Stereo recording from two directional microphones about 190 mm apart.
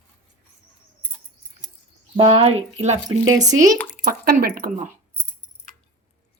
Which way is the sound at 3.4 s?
20° right (ahead or behind).